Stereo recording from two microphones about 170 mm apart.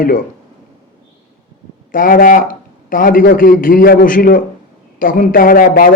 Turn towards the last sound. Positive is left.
turn(degrees=55)  # may be behind; listen again after turning